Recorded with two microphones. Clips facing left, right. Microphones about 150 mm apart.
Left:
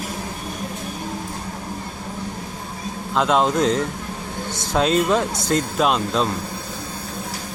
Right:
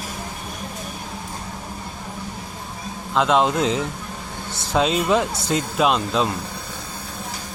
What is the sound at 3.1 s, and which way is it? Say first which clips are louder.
Speech: even; centre (ahead or behind).